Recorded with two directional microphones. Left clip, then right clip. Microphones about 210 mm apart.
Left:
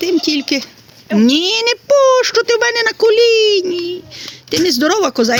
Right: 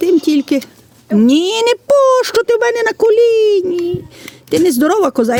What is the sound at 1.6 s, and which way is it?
Speech, 65° right (ahead or behind).